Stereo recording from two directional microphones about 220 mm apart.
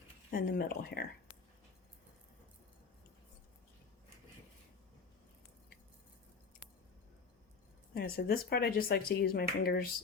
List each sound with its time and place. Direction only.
0.3 s speech: 40° left (ahead or behind)
7.9 s speech: 45° left (ahead or behind)